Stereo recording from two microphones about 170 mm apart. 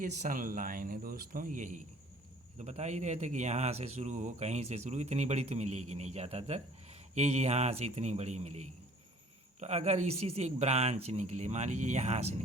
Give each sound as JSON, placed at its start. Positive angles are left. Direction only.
{"t": 0.0, "sound": "speech", "side_deg": -50}